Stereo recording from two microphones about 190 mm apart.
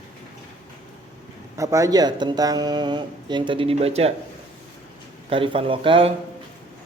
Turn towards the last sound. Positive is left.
turn(degrees=-30)  # may be behind; listen again after turning